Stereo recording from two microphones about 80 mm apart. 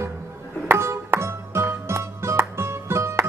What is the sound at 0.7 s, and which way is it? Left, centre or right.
Music, right.